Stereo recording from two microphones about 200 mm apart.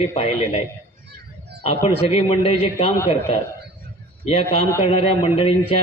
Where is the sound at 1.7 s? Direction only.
30° left (ahead or behind).